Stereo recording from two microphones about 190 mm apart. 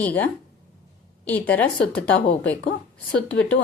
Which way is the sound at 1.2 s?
10° left (ahead or behind).